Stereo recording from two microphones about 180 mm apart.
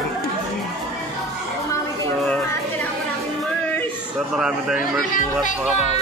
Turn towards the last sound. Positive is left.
turn(degrees=-5)  # may be behind; listen again after turning